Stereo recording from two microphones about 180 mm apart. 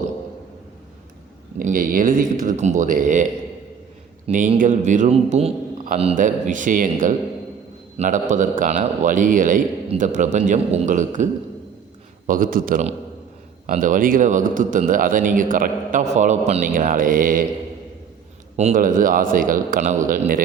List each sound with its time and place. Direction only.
1.5 s a man's voice: 50° right (ahead or behind)
4.3 s a man's voice: 45° right (ahead or behind)
12.3 s a man's voice: 50° right (ahead or behind)
18.5 s a man's voice: 40° right (ahead or behind)